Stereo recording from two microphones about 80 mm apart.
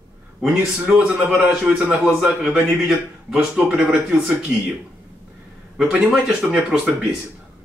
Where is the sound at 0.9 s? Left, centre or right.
Centre.